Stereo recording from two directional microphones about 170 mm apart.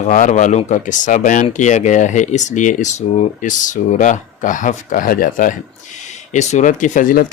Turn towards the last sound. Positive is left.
turn(degrees=55)  # may be behind; listen again after turning